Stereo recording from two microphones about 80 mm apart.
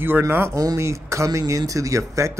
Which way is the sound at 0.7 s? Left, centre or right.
Right.